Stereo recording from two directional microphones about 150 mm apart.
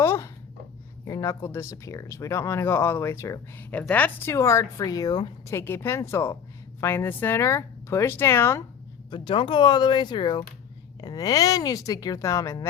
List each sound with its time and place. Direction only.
0.0 s a sound: 20° left (ahead or behind)
1.0 s speech: 20° left (ahead or behind)
5.5 s speech: 15° left (ahead or behind)
9.0 s speech: 35° left (ahead or behind)